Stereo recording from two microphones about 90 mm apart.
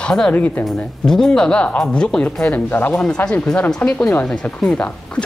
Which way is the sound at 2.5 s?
20° left (ahead or behind).